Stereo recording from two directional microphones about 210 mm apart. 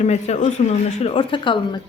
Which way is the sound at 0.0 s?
30° left (ahead or behind).